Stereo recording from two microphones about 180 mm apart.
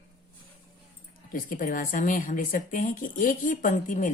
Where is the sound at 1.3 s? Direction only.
50° left (ahead or behind).